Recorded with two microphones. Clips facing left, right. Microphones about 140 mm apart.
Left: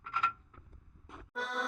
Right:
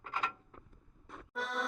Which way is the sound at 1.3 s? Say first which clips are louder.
Even; centre (ahead or behind).